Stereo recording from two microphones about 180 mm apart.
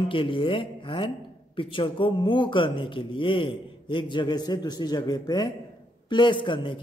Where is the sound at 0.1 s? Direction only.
30° left (ahead or behind).